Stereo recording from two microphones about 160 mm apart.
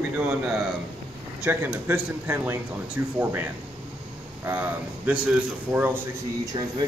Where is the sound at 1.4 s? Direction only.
10° right (ahead or behind).